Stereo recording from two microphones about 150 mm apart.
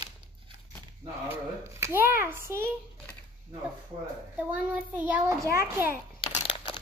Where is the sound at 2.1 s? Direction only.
15° right (ahead or behind).